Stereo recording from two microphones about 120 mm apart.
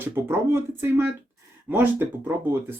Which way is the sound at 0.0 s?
20° right (ahead or behind).